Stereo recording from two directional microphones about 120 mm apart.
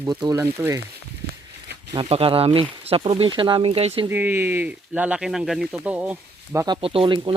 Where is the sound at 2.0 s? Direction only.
50° right (ahead or behind).